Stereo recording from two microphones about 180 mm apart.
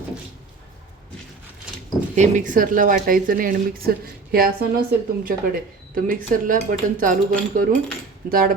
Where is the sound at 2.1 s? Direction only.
45° right (ahead or behind).